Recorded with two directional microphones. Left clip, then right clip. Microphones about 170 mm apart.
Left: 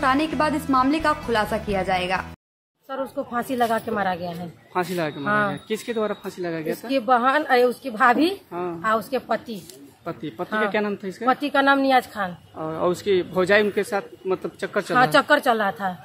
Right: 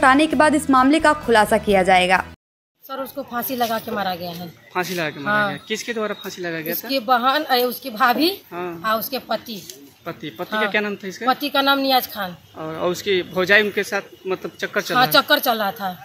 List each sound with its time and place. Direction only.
0.0 s a woman's voice: 35° right (ahead or behind)
2.9 s a woman's voice: 10° left (ahead or behind)